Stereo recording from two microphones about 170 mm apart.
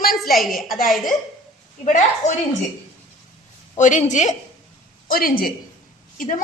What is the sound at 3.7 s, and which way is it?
Speech, 45° left (ahead or behind).